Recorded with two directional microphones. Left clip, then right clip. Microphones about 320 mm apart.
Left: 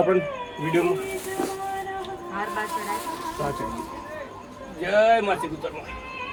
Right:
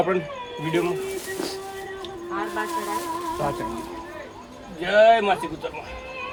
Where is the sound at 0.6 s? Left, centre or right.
Centre.